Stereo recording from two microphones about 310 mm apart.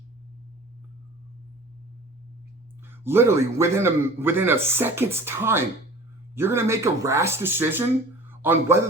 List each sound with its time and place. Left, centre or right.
2.9 s a man's voice: centre